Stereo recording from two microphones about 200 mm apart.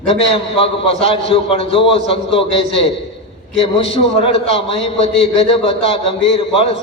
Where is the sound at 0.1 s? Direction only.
30° left (ahead or behind).